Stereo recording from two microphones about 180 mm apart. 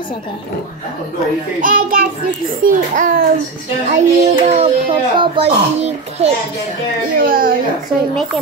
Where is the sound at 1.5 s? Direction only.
50° right (ahead or behind).